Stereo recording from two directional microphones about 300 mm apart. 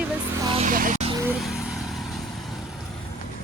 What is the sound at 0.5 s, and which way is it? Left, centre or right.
Vehicle, right.